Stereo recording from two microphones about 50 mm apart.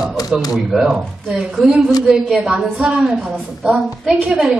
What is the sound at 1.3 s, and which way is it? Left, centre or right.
Speech, centre.